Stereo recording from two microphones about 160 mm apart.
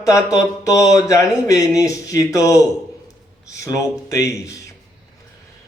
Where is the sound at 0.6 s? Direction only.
20° left (ahead or behind).